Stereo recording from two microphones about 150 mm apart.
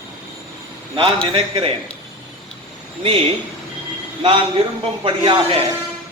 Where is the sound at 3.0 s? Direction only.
40° right (ahead or behind).